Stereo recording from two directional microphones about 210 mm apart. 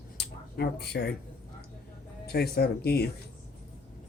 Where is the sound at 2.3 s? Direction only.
50° left (ahead or behind).